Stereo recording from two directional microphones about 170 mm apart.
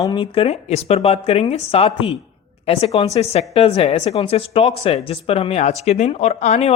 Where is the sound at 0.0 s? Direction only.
25° left (ahead or behind).